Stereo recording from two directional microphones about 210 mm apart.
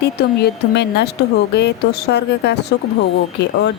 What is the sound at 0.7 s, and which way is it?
A woman's voice, 55° left (ahead or behind).